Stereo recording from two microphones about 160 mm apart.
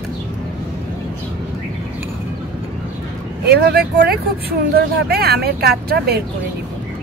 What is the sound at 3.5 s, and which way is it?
Speech, 80° right.